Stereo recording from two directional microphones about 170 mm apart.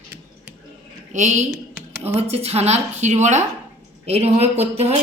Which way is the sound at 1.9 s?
15° right (ahead or behind).